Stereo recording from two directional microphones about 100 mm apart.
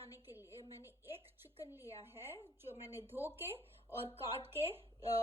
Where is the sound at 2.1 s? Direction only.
25° right (ahead or behind).